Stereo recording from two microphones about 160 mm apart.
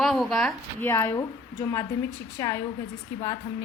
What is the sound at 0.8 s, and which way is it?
A woman's voice, 15° left (ahead or behind).